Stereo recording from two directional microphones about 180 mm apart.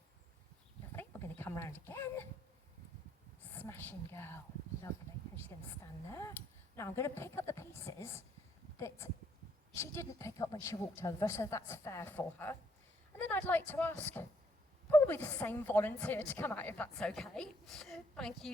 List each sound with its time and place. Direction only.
0.9 s a sound: 10° left (ahead or behind)
3.4 s a woman's voice: 10° left (ahead or behind)
5.8 s a woman's voice: 15° left (ahead or behind)